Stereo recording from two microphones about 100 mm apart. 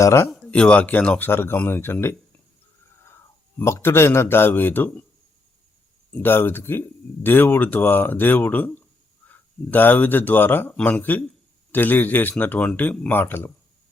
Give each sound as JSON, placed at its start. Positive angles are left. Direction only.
{"t": 0.0, "sound": "speech", "side_deg": 30}
{"t": 0.3, "sound": "a sound", "side_deg": 0}
{"t": 0.5, "sound": "speech", "side_deg": 10}
{"t": 3.6, "sound": "speech", "side_deg": 25}
{"t": 6.1, "sound": "speech", "side_deg": 20}